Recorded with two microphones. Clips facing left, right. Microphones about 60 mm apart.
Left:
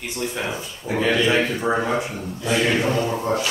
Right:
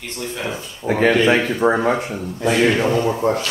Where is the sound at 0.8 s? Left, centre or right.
Right.